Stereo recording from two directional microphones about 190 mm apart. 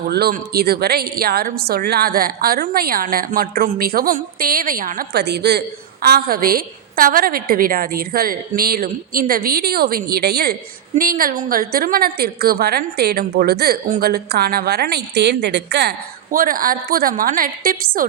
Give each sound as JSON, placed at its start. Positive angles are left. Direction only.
{"t": 0.1, "sound": "a woman's voice", "side_deg": -55}